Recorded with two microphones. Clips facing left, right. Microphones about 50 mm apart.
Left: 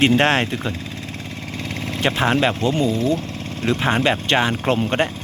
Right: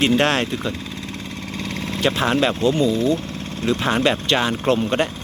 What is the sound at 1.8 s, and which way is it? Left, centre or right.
Speech, left.